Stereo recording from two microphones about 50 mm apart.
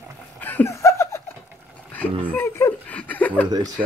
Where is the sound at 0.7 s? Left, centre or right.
Left.